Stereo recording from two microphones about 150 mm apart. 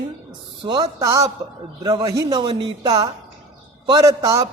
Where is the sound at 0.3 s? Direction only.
30° right (ahead or behind).